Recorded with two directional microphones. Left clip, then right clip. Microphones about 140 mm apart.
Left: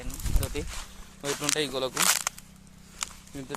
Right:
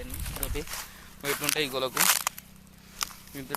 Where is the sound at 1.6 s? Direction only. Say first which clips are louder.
Even; centre (ahead or behind).